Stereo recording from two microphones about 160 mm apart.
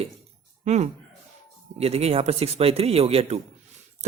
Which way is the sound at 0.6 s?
45° right (ahead or behind).